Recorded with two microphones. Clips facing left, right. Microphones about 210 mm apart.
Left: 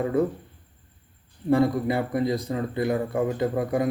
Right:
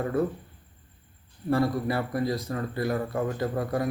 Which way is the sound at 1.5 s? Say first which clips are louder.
Left 4 dB; 15° left (ahead or behind).